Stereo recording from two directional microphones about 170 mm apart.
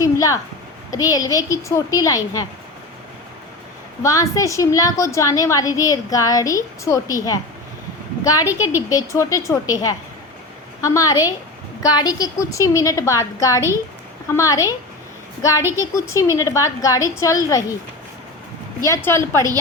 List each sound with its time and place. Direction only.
0.0 s a sound: 20° left (ahead or behind)
0.9 s a woman's voice: 20° left (ahead or behind)
4.0 s a woman's voice: 20° left (ahead or behind)
18.8 s a woman's voice: 15° left (ahead or behind)